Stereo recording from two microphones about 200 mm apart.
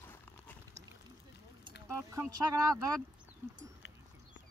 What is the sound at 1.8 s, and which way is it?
Speech, 15° right (ahead or behind).